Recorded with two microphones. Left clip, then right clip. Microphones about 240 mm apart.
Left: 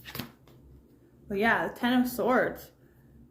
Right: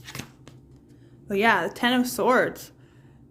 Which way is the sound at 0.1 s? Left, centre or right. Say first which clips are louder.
Right 1 dB; centre.